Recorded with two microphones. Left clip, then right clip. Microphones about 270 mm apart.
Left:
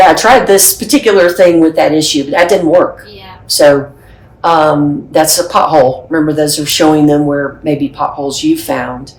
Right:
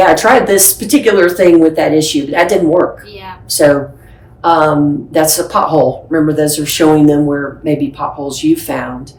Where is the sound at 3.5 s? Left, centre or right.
Centre.